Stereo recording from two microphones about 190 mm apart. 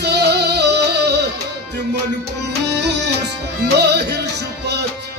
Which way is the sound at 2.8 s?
65° right (ahead or behind).